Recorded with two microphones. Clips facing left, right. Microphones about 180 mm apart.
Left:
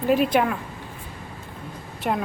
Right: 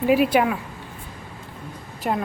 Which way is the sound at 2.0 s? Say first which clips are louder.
Right 1 dB; centre (ahead or behind).